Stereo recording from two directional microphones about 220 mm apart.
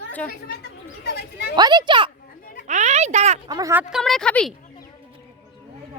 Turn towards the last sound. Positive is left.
turn(degrees=5)  # may be behind; listen again after turning